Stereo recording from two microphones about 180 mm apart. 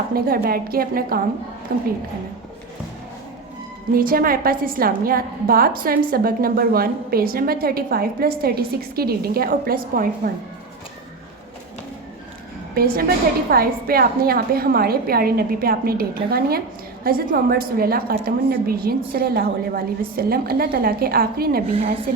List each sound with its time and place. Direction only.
0.1 s a woman's voice: 55° right (ahead or behind)
3.9 s a woman's voice: 55° right (ahead or behind)
12.7 s a woman's voice: 55° right (ahead or behind)